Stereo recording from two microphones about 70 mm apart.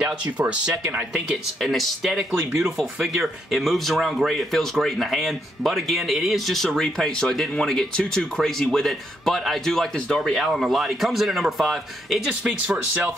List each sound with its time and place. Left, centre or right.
0.9 s speech: centre
1.6 s speech: centre